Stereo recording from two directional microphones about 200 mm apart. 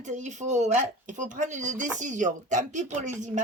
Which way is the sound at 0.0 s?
35° right (ahead or behind).